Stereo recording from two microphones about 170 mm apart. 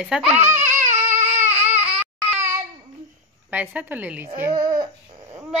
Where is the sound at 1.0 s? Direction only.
45° right (ahead or behind).